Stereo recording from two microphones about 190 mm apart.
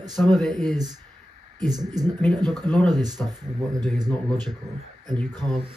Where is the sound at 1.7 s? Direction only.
20° right (ahead or behind).